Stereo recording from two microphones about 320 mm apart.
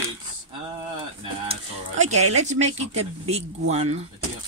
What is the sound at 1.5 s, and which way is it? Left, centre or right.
Cutlery, right.